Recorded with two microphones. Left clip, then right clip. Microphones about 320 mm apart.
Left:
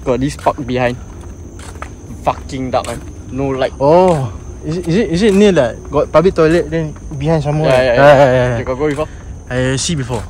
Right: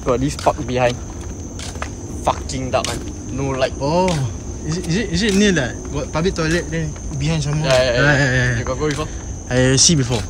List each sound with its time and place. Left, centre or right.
0.0 s speech: left
2.2 s speech: left; by 7.2 s centre
7.4 s speech: centre
8.0 s speech: centre
8.6 s speech: left
9.5 s speech: centre